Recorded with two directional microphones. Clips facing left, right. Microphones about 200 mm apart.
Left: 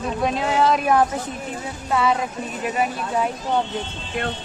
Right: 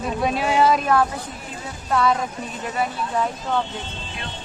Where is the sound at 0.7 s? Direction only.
15° left (ahead or behind).